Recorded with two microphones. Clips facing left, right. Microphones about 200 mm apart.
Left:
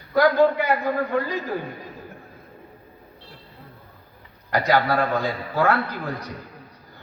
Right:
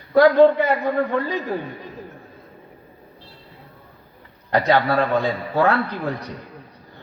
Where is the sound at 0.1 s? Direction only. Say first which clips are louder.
Right 5 dB; 25° right (ahead or behind).